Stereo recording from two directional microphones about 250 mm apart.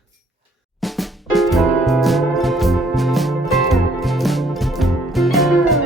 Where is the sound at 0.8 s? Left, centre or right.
Centre.